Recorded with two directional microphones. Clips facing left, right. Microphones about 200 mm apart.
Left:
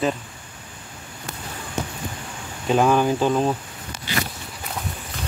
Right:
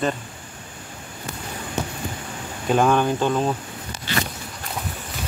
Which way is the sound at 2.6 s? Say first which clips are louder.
Left 1 dB; centre (ahead or behind).